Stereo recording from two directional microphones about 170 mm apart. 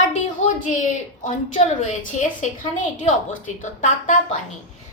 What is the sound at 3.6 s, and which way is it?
Speech, 50° left (ahead or behind).